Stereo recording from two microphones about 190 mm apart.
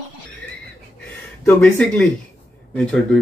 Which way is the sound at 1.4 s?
5° left (ahead or behind).